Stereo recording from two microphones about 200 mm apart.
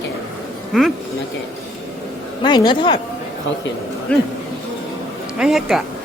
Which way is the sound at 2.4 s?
20° left (ahead or behind).